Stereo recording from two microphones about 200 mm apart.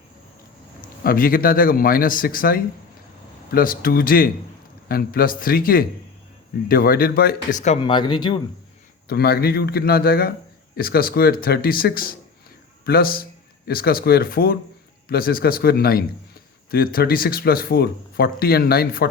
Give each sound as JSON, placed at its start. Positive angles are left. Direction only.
{"t": 1.0, "sound": "speech", "side_deg": 45}
{"t": 7.6, "sound": "speech", "side_deg": 30}
{"t": 9.0, "sound": "a man's voice", "side_deg": 50}